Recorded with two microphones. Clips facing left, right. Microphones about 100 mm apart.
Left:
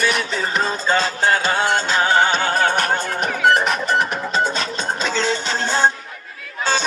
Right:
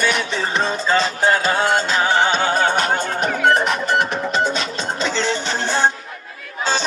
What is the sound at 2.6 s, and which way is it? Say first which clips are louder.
Music: right 1 dB; 20° right (ahead or behind).